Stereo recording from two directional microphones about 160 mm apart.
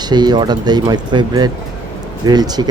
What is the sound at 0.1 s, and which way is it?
Speech, 25° right (ahead or behind).